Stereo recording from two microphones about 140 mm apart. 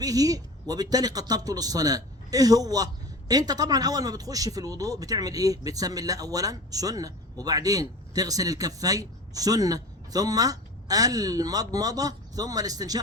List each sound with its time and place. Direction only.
0.0 s speech: 25° right (ahead or behind)